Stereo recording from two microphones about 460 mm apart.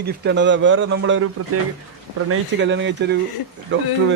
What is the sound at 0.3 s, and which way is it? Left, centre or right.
A man's voice, right.